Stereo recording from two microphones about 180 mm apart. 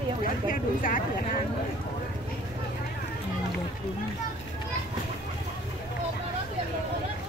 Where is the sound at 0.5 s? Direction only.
50° left (ahead or behind).